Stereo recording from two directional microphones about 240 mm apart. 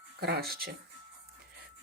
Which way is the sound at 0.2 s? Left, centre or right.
Right.